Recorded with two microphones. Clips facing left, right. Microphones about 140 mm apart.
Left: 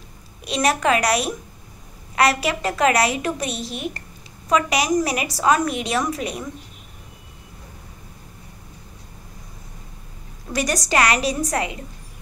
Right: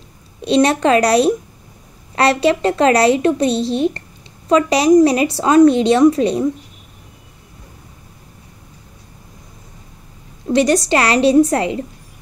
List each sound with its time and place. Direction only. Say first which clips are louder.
0.4 s a woman's voice: right 8 dB; 30° right (ahead or behind)
10.5 s a woman's voice: right 8 dB; 25° right (ahead or behind)